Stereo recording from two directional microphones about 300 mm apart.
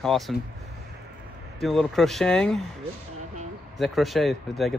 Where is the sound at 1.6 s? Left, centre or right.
Centre.